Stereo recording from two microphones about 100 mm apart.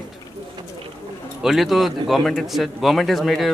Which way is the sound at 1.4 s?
5° right (ahead or behind).